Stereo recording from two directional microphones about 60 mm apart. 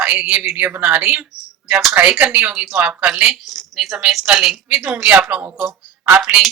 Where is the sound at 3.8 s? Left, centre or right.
Centre.